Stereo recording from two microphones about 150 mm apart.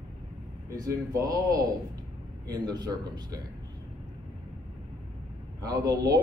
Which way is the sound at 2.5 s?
25° right (ahead or behind).